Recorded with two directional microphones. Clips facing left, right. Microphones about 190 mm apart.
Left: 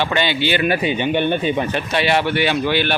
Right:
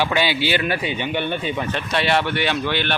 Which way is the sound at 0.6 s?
15° left (ahead or behind).